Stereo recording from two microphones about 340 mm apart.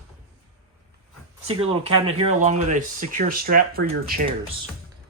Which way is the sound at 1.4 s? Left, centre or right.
Centre.